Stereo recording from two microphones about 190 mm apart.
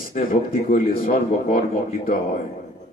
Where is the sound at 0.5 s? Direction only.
50° left (ahead or behind).